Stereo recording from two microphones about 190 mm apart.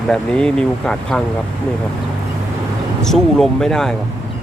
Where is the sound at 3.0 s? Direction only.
Centre (ahead or behind).